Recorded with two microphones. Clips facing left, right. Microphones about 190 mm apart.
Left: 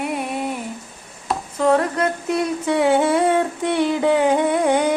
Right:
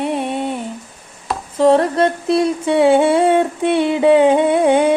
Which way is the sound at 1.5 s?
30° right (ahead or behind).